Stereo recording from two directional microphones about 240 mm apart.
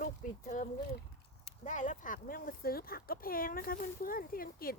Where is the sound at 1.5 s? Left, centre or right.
Left.